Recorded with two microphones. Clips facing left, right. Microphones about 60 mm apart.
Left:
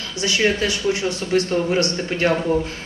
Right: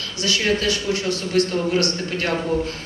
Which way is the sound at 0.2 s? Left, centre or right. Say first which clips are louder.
Left 2 dB; left.